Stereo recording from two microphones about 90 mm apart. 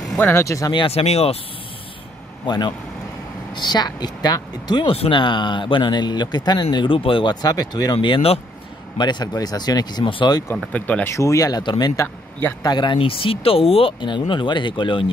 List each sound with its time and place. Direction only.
0.2 s speech: 25° left (ahead or behind)
0.8 s speech: 90° left
2.4 s speech: 55° left (ahead or behind); by 7.3 s 75° left (ahead or behind)
7.4 s speech: 45° left (ahead or behind); by 8.4 s 80° left
8.9 s speech: 55° left (ahead or behind)
10.5 s speech: 15° left (ahead or behind)
11.1 s speech: 40° left (ahead or behind)
12.6 s speech: 55° left (ahead or behind); by 14.2 s 75° left (ahead or behind)
14.3 s speech: 65° left (ahead or behind)